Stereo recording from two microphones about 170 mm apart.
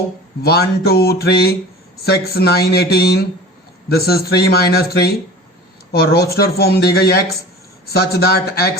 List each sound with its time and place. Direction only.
0.4 s speech: 65° left (ahead or behind)